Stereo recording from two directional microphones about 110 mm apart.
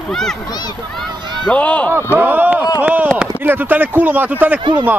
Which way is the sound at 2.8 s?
15° right (ahead or behind).